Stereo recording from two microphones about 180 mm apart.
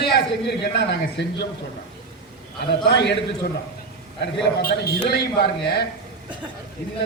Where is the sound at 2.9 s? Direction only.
70° left (ahead or behind).